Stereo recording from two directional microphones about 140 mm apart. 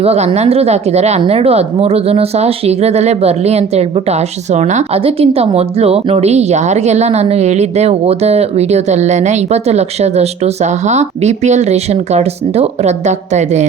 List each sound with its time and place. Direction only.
0.0 s a woman's voice: 45° right (ahead or behind)